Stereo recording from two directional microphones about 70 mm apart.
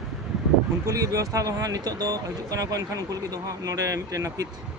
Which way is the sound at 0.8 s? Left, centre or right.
Right.